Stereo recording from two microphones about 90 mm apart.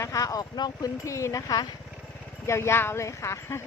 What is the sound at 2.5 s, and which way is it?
Speech, 30° left (ahead or behind).